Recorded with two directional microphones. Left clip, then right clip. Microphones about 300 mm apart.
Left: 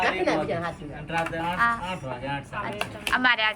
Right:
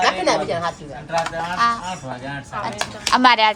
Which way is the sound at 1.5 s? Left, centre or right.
Centre.